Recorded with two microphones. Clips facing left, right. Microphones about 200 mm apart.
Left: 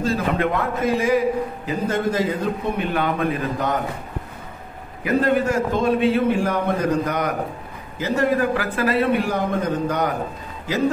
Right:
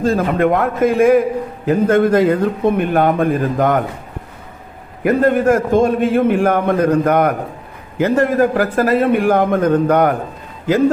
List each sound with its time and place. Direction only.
0.0 s a man's voice: 50° right (ahead or behind)
5.0 s a man's voice: 50° right (ahead or behind)